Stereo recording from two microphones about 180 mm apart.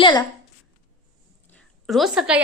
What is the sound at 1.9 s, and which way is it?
Speech, centre (ahead or behind).